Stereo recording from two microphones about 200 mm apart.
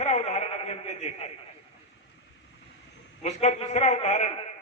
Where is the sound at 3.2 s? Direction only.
35° left (ahead or behind).